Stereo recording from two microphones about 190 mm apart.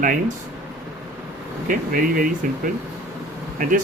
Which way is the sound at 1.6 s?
45° right (ahead or behind).